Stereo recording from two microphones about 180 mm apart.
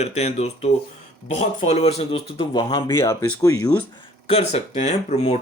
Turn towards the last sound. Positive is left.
turn(degrees=40)  # may be behind; listen again after turning